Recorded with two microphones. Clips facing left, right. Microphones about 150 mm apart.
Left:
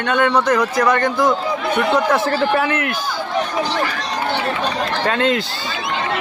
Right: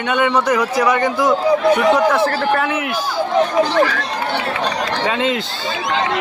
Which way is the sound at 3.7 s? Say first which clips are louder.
Right 6 dB; 60° right (ahead or behind).